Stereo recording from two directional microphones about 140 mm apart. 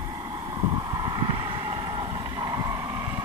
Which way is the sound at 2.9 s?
15° right (ahead or behind).